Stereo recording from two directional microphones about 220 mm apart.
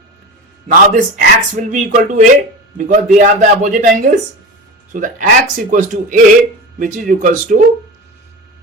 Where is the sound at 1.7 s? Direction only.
35° right (ahead or behind).